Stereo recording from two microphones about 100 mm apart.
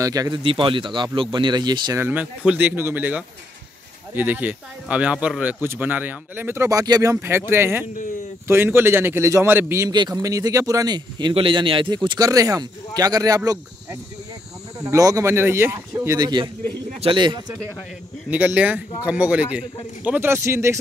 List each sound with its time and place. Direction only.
0.0 s speech: 35° right (ahead or behind)
0.4 s speech: 60° right (ahead or behind)
2.0 s speech: 20° right (ahead or behind); by 7.2 s 35° right (ahead or behind)
7.2 s speech: 20° right (ahead or behind)
9.8 s speech: 40° right (ahead or behind)
11.3 s speech: 60° right (ahead or behind)
12.2 s speech: 35° right (ahead or behind)
14.8 s speech: 35° right (ahead or behind)
16.2 s speech: 45° right (ahead or behind)
18.3 s speech: 10° right (ahead or behind)
20.2 s speech: 25° right (ahead or behind)